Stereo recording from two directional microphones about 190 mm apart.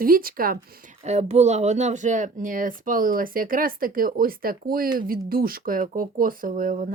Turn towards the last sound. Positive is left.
turn(degrees=-45)  # may be behind; listen again after turning